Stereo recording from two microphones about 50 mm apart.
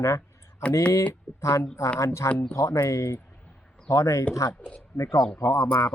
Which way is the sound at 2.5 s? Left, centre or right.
Left.